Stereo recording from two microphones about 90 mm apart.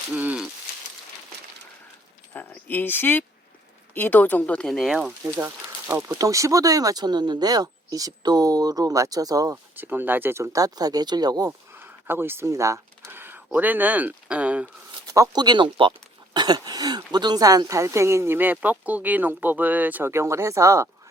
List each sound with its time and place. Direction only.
0.1 s speech: 15° right (ahead or behind)
2.3 s a sound: 20° left (ahead or behind)
3.9 s speech: 20° left (ahead or behind); by 5.1 s 5° right (ahead or behind)
5.9 s speech: 25° right (ahead or behind)
6.1 s speech: 40° right (ahead or behind)
9.7 s speech: 20° right (ahead or behind); by 11.5 s 45° right (ahead or behind)
11.7 s a sound: 25° right (ahead or behind)
12.5 s speech: 35° right (ahead or behind); by 14.7 s 15° right (ahead or behind)
15.1 s speech: 45° right (ahead or behind)